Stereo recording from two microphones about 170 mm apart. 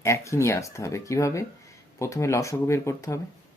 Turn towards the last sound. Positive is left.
turn(degrees=15)  # may be behind; listen again after turning